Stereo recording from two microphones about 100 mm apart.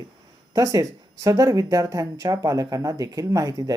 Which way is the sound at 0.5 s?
35° right (ahead or behind).